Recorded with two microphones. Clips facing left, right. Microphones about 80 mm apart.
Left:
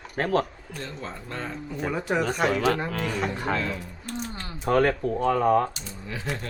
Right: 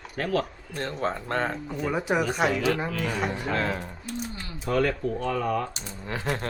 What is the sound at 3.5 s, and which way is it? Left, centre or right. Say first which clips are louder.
Speech: right 2 dB; right.